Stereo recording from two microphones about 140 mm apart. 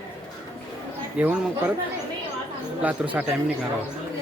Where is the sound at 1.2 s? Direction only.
10° right (ahead or behind).